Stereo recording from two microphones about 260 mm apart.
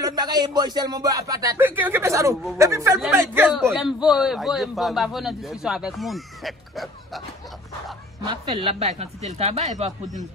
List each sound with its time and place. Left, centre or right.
0.0 s a man's voice: centre
8.3 s speech: right